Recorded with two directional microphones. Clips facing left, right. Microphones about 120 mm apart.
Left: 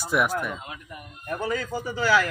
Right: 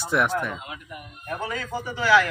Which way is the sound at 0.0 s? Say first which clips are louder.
Right 1 dB; 10° left (ahead or behind).